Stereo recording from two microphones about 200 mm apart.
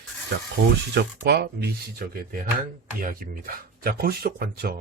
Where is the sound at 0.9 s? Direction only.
55° right (ahead or behind).